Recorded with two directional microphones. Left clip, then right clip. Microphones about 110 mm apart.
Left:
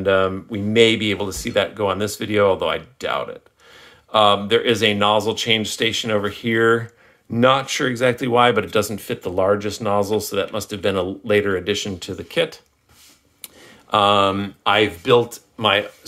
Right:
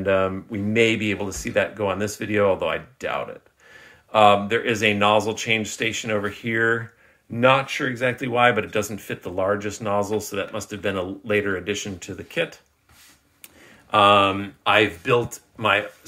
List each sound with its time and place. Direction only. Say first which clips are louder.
0.0 s speech: left 3 dB; 15° left (ahead or behind)
6.1 s speech: left 4 dB; 45° left (ahead or behind)
7.3 s speech: left 2 dB; 90° left
7.9 s speech: left 7 dB; 60° left (ahead or behind)
8.7 s speech: left 5 dB; 35° left (ahead or behind)
10.3 s speech: left 5 dB; 45° left (ahead or behind)
13.8 s speech: even; 90° left; by 15.1 s 50° left (ahead or behind)
15.2 s speech: left 3 dB; 30° left (ahead or behind)